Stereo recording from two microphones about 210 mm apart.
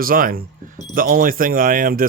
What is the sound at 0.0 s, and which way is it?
Speech, 45° right (ahead or behind).